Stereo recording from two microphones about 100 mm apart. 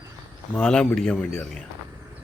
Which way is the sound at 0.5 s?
10° left (ahead or behind).